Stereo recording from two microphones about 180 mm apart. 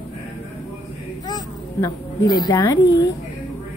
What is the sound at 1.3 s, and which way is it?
Children playing, 20° left (ahead or behind).